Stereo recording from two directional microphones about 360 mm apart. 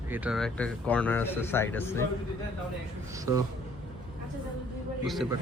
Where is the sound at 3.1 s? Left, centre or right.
Centre.